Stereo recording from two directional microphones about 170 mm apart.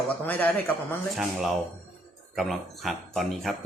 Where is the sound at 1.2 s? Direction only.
Centre (ahead or behind).